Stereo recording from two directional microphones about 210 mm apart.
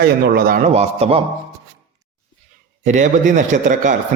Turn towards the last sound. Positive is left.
turn(degrees=-35)  # may be behind; listen again after turning